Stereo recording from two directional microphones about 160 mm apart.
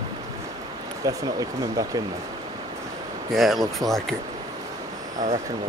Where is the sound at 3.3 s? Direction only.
Centre (ahead or behind).